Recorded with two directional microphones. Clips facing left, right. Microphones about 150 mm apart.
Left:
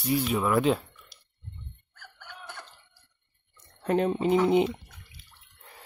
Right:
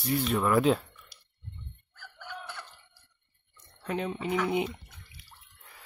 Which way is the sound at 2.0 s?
55° left (ahead or behind).